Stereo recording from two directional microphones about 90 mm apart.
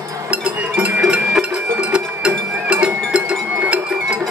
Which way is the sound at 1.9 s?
10° right (ahead or behind).